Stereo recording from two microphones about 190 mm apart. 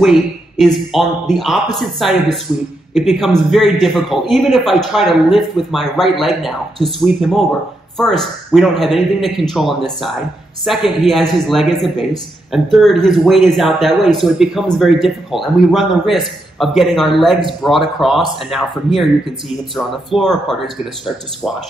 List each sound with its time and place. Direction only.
0.0 s a man's voice: centre (ahead or behind)